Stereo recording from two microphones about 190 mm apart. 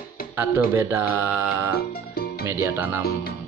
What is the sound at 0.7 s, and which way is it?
Mantra, 15° right (ahead or behind).